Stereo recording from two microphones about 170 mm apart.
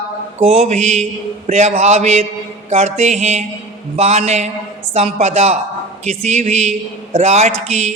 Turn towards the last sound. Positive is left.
turn(degrees=-40)  # may be behind; listen again after turning